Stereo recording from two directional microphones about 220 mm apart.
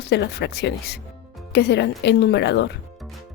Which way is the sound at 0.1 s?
50° left (ahead or behind).